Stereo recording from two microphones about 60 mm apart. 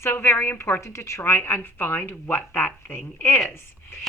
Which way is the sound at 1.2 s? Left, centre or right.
Left.